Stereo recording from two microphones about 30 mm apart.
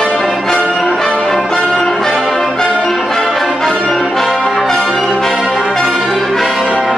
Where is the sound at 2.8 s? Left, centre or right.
Centre.